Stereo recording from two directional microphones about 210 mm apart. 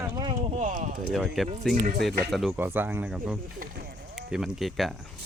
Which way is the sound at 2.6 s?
10° right (ahead or behind).